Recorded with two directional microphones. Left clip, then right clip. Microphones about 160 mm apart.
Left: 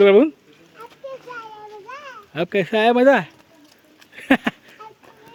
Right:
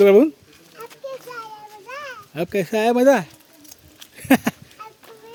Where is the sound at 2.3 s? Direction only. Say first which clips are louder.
Left 2 dB; 5° right (ahead or behind).